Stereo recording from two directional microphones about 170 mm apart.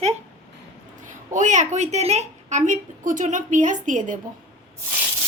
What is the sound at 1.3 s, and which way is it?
Speech, 45° right (ahead or behind).